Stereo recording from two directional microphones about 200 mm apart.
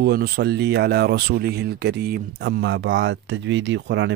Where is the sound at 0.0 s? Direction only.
55° right (ahead or behind).